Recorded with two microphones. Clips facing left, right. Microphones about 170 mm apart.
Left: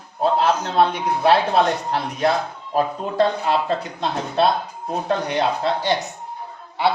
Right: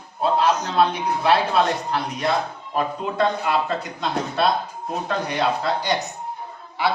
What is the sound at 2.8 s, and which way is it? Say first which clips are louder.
A man's voice: left 3 dB; 30° left (ahead or behind).